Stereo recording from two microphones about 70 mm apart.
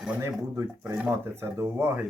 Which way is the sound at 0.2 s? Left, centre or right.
Right.